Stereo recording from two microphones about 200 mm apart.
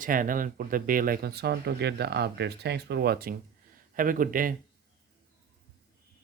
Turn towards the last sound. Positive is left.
turn(degrees=-45)  # may be behind; listen again after turning